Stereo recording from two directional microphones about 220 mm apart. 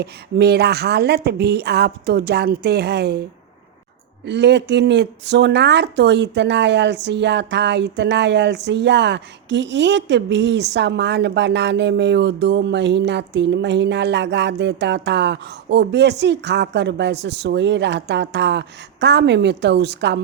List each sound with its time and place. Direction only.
0.0 s speech: 50° right (ahead or behind)
4.3 s speech: 50° right (ahead or behind)